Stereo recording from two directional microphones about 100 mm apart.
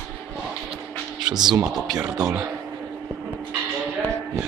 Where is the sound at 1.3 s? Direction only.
45° right (ahead or behind).